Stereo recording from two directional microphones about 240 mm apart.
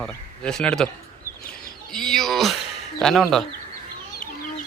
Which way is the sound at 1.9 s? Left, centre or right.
Centre.